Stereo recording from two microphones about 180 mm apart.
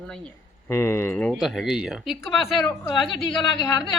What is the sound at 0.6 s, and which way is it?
Speech, 15° left (ahead or behind).